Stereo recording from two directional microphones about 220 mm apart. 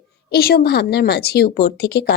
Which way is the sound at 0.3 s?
45° left (ahead or behind).